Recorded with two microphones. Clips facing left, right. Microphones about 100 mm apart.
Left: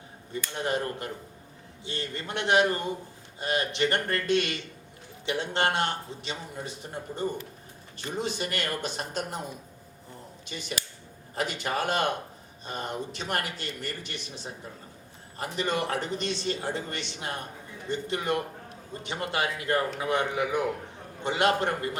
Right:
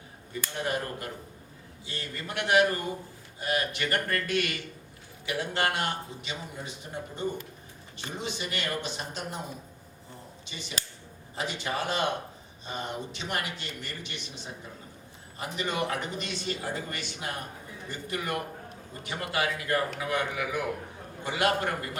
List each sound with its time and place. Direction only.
0.6 s a man's voice: 25° left (ahead or behind)
7.9 s a man's voice: 40° left (ahead or behind)
10.4 s a man's voice: 50° left (ahead or behind); by 21.9 s 30° left (ahead or behind)